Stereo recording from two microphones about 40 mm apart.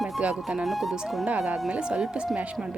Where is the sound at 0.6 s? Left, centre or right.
Centre.